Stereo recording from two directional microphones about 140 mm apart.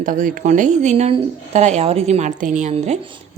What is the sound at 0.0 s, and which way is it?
Speech, 70° right (ahead or behind).